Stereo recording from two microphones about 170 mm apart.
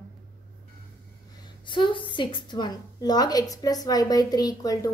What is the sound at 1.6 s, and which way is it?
A woman's voice, 30° left (ahead or behind).